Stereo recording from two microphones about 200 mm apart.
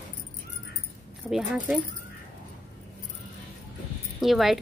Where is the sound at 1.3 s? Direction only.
5° right (ahead or behind).